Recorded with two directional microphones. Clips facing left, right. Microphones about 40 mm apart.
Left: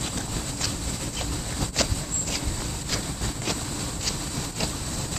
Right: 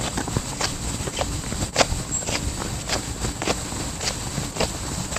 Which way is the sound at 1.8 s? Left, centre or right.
Right.